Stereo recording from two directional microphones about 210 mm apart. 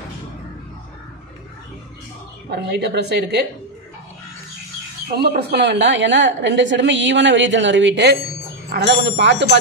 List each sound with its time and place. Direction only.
2.5 s a woman's voice: 50° right (ahead or behind)
5.5 s a woman's voice: 55° right (ahead or behind)